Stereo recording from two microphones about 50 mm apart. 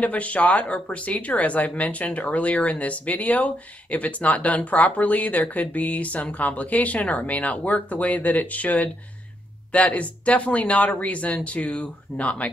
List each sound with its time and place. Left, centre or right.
0.0 s speech: left